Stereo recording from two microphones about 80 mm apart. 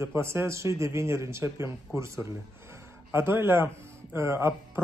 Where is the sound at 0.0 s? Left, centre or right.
Right.